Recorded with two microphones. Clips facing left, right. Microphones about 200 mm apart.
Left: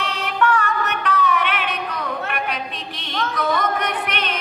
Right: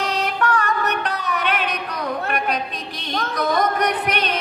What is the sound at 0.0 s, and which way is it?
Music, 40° right (ahead or behind).